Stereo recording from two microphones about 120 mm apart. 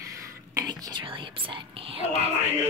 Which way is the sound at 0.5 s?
30° right (ahead or behind).